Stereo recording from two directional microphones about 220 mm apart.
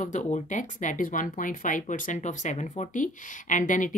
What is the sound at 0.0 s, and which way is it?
Speech, 35° left (ahead or behind).